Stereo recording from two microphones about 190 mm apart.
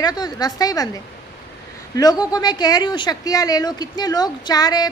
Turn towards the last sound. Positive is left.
turn(degrees=20)  # may be behind; listen again after turning